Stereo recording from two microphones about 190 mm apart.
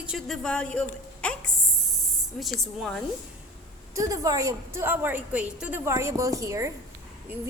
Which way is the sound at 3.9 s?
15° right (ahead or behind).